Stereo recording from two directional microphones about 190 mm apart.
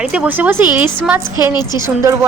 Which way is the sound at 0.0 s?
5° right (ahead or behind).